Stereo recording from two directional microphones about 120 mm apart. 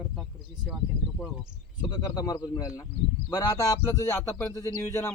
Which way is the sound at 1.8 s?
35° left (ahead or behind).